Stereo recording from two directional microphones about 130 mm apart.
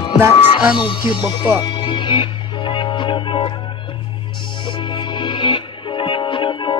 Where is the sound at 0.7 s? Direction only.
35° left (ahead or behind).